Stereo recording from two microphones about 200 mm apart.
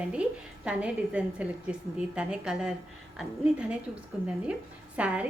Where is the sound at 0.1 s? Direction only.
5° right (ahead or behind).